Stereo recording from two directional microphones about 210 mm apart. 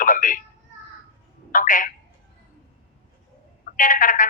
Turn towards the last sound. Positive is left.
turn(degrees=40)  # may be behind; listen again after turning